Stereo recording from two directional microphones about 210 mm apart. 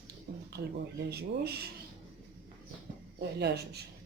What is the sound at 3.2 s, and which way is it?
Speech, 50° right (ahead or behind).